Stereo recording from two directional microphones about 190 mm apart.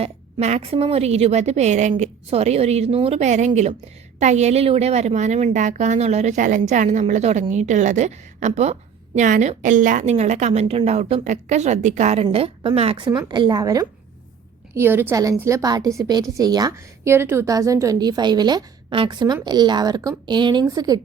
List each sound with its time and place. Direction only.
0.0 s a woman's voice: 35° right (ahead or behind)